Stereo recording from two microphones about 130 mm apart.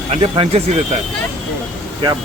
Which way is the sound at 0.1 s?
50° right (ahead or behind).